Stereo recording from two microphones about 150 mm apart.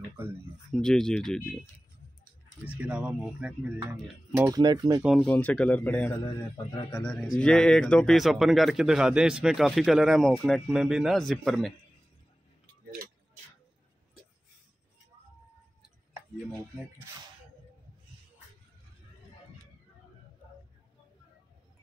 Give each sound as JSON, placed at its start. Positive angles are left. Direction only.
{"t": 0.2, "sound": "speech", "side_deg": -15}
{"t": 0.7, "sound": "speech", "side_deg": 5}
{"t": 2.7, "sound": "speech", "side_deg": -10}
{"t": 4.5, "sound": "speech", "side_deg": -25}
{"t": 5.0, "sound": "speech", "side_deg": 5}